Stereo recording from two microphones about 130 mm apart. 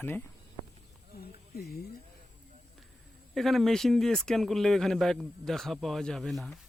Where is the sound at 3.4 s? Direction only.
Centre (ahead or behind).